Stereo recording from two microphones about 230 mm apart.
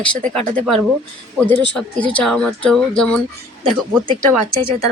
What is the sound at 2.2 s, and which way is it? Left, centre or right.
Speech, centre.